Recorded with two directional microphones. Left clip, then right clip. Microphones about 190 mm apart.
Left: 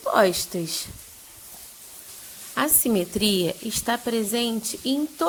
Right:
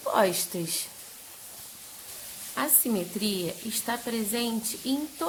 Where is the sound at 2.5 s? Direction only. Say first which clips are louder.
Left 6 dB; 35° left (ahead or behind).